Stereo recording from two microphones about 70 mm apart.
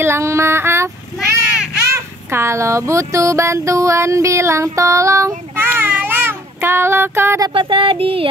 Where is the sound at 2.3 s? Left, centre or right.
Right.